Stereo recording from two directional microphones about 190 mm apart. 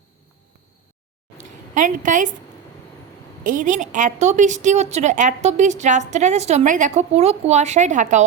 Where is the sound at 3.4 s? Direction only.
45° right (ahead or behind).